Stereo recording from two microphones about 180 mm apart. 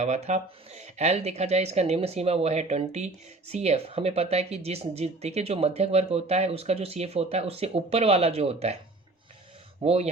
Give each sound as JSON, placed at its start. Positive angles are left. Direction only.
{"t": 0.0, "sound": "speech", "side_deg": -40}
{"t": 9.8, "sound": "speech", "side_deg": -35}